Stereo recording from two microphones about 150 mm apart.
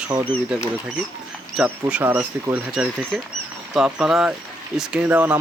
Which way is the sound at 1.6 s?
Centre (ahead or behind).